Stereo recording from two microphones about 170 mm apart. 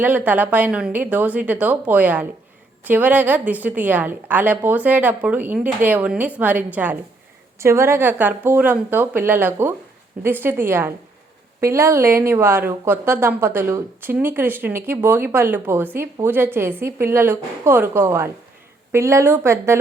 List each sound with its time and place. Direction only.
0.0 s a woman's voice: 10° right (ahead or behind)